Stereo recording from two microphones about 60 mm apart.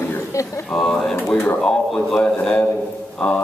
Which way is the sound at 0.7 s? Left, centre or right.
Centre.